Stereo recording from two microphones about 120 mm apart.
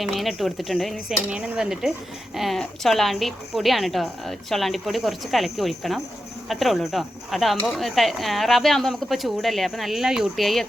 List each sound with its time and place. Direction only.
0.0 s a woman's voice: centre (ahead or behind)